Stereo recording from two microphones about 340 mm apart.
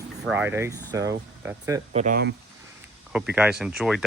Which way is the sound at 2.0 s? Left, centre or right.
Right.